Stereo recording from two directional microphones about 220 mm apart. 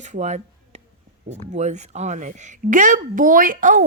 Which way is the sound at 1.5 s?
30° right (ahead or behind).